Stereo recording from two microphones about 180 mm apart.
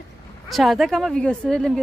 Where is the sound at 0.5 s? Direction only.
Centre (ahead or behind).